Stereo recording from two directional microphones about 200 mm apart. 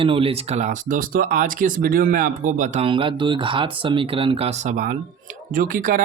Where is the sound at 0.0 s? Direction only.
25° right (ahead or behind).